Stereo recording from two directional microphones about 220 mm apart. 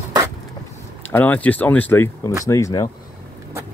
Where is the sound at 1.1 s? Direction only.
10° left (ahead or behind).